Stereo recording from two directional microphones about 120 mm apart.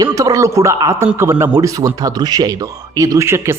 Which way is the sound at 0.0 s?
30° right (ahead or behind).